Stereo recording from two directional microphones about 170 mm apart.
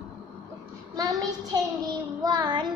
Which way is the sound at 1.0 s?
20° right (ahead or behind).